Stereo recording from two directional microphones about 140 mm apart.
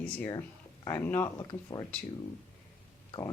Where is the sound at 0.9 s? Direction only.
20° left (ahead or behind).